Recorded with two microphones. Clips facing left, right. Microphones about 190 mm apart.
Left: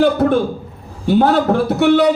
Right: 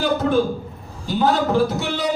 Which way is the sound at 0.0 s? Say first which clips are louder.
Left 5 dB; 60° left (ahead or behind).